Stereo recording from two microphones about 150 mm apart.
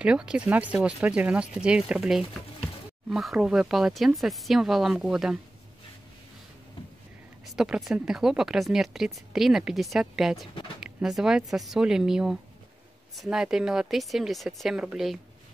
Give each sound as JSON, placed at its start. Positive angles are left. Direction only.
{"t": 0.0, "sound": "speech", "side_deg": -5}
{"t": 7.4, "sound": "speech", "side_deg": -5}